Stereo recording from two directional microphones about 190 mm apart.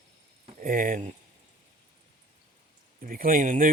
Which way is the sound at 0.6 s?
45° right (ahead or behind).